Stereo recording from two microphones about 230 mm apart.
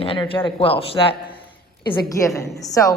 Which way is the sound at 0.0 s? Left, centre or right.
Left.